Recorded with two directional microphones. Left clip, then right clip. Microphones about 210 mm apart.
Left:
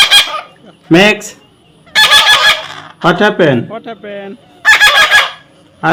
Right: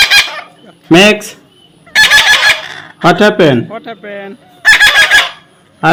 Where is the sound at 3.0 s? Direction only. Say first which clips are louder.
Right 2 dB; 20° right (ahead or behind).